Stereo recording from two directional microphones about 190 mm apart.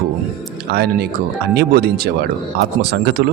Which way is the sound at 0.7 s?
55° right (ahead or behind).